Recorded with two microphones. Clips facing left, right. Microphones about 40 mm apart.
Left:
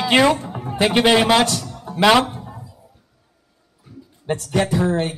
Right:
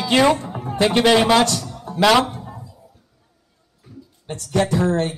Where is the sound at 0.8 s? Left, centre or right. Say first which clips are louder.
Even; centre.